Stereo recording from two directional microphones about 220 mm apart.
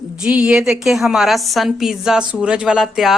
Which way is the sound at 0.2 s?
5° right (ahead or behind).